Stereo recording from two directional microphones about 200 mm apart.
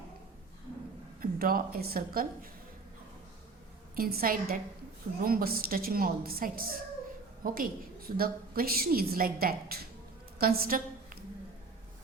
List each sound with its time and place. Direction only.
1.2 s a woman's voice: 45° right (ahead or behind)
3.9 s a woman's voice: 45° right (ahead or behind)